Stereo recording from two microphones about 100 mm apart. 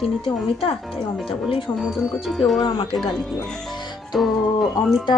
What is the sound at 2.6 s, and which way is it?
Speech, 60° left (ahead or behind).